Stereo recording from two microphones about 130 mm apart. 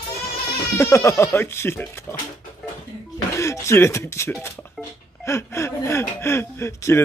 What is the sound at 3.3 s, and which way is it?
Speech, 20° left (ahead or behind).